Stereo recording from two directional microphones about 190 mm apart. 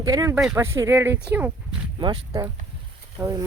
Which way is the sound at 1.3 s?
10° right (ahead or behind).